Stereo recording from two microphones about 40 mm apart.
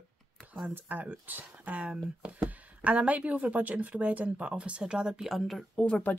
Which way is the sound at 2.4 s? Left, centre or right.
Right.